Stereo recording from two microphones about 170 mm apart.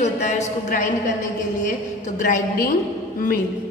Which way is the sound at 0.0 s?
40° left (ahead or behind).